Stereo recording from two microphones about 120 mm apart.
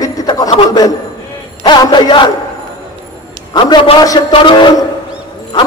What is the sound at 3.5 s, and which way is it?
A man's voice, 40° left (ahead or behind).